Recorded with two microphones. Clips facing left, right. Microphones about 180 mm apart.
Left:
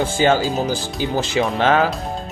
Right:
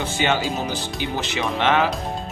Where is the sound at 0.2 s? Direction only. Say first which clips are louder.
Left 5 dB; 35° left (ahead or behind).